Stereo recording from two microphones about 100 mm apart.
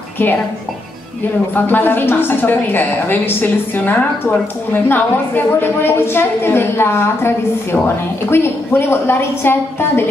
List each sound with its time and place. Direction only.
1.5 s a woman's voice: 20° left (ahead or behind)